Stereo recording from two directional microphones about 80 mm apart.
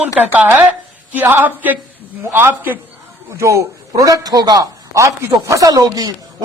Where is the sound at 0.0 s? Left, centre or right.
Centre.